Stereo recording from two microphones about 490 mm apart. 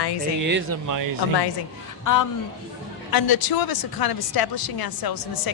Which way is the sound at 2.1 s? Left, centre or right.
Left.